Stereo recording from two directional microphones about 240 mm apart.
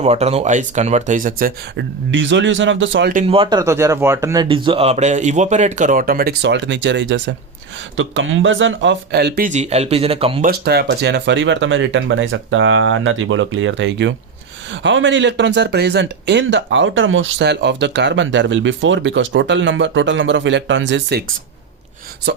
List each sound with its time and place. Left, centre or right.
0.0 s speech: right
3.1 s speech: right
10.4 s speech: right